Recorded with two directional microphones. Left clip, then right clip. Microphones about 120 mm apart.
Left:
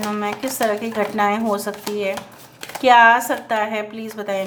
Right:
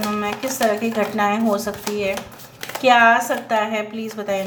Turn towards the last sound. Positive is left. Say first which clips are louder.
# right 1 dB
turn(degrees=35)  # may be behind; listen again after turning